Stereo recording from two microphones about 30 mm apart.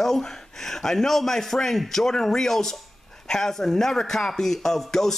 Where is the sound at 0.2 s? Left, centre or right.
Centre.